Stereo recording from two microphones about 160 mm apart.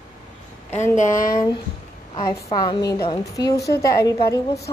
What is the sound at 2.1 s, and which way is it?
A woman's voice, 25° left (ahead or behind).